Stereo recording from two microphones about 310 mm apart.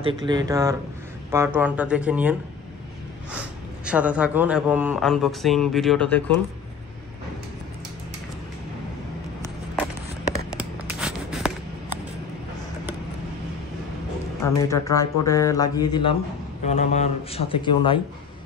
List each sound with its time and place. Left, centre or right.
0.0 s a man's voice: centre
10.6 s writing: centre
14.4 s a man's voice: centre